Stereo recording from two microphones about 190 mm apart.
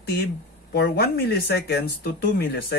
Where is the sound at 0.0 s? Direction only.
60° left (ahead or behind).